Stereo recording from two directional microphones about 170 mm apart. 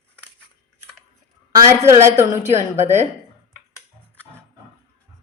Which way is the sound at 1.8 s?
15° right (ahead or behind).